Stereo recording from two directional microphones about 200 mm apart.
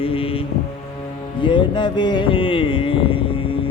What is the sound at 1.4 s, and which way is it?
Music, 25° left (ahead or behind).